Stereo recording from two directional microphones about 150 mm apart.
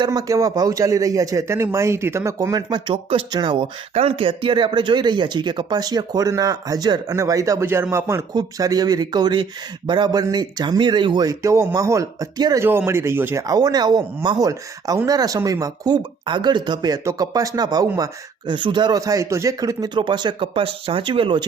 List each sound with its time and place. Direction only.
0.0 s speech: 25° right (ahead or behind)